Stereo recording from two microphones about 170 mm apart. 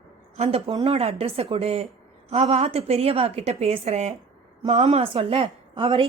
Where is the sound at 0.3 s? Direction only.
40° right (ahead or behind).